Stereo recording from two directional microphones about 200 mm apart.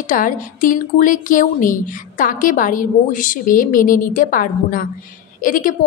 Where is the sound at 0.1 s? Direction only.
40° left (ahead or behind).